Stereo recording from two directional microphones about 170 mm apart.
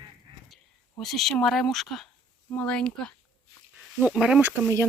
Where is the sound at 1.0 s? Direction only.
Centre (ahead or behind).